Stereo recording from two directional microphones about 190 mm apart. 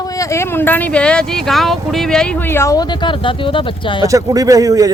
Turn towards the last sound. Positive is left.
turn(degrees=-20)  # may be behind; listen again after turning